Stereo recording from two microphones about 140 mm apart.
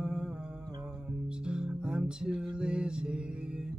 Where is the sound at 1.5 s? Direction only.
5° right (ahead or behind).